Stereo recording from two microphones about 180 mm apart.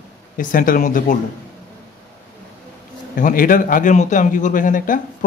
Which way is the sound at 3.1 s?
50° left (ahead or behind).